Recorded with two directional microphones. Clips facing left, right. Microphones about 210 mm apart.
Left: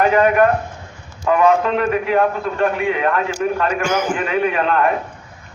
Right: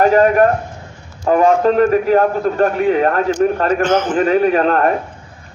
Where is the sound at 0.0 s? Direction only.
40° right (ahead or behind).